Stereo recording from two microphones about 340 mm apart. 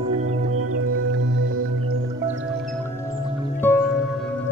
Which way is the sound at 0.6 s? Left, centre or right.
Right.